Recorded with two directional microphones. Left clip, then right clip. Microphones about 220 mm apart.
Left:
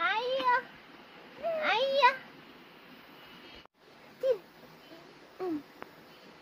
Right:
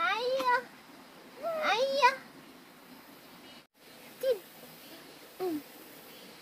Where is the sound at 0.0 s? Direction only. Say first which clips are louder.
Even; 20° right (ahead or behind).